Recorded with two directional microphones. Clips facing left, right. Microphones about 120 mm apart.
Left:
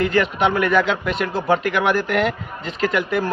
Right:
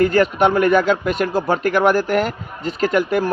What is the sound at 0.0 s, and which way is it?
A man's voice, 40° right (ahead or behind).